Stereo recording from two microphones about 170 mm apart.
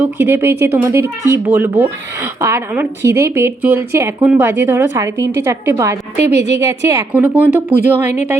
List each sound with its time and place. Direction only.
0.0 s speech: 15° right (ahead or behind)
6.3 s a woman's voice: 40° left (ahead or behind)
6.7 s speech: 15° right (ahead or behind)